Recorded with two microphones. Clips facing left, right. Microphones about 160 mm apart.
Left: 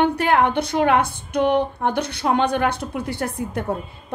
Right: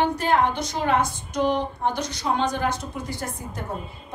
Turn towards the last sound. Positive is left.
turn(degrees=65)  # may be behind; listen again after turning